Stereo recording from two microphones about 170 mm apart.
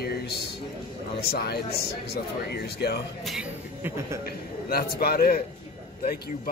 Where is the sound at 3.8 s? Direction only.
15° right (ahead or behind).